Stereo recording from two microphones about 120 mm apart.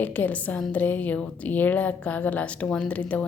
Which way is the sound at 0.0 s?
15° left (ahead or behind).